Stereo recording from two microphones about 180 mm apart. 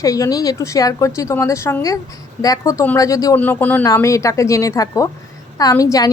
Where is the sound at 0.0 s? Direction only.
20° left (ahead or behind).